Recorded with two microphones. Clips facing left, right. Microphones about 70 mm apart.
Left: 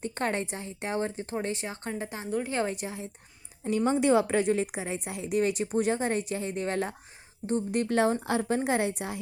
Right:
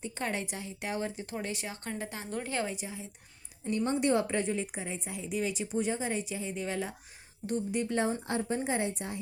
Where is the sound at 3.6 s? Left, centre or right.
Left.